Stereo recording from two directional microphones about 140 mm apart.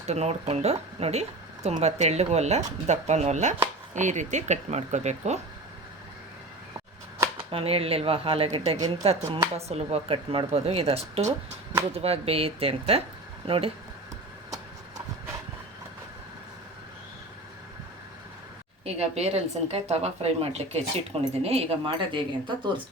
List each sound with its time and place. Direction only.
0.1 s speech: 50° right (ahead or behind)
7.5 s speech: 45° right (ahead or behind)
18.9 s speech: 50° right (ahead or behind)